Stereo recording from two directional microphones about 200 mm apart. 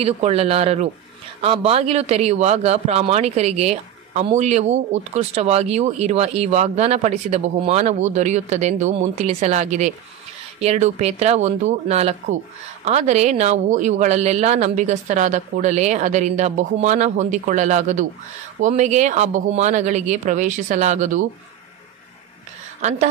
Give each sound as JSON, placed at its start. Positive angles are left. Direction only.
{"t": 0.0, "sound": "a man's voice", "side_deg": -30}
{"t": 22.8, "sound": "a woman's voice", "side_deg": -35}